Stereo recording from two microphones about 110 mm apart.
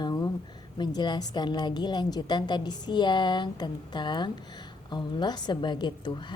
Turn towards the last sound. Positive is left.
turn(degrees=45)  # may be behind; listen again after turning